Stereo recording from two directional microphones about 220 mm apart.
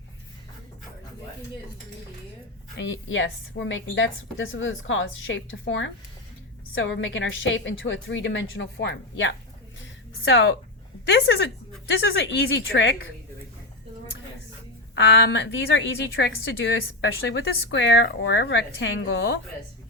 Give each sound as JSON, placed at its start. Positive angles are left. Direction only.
{"t": 2.7, "sound": "a woman's voice", "side_deg": 60}
{"t": 14.9, "sound": "a woman's voice", "side_deg": 55}